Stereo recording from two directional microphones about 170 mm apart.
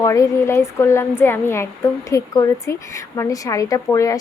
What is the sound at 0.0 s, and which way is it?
A woman's voice, 20° left (ahead or behind).